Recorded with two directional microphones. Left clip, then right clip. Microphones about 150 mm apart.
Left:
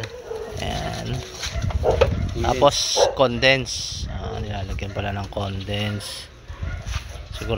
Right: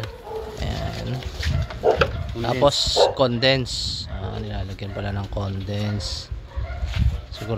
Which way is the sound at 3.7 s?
45° right (ahead or behind).